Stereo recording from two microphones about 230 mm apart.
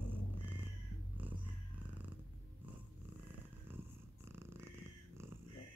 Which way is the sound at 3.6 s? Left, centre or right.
Centre.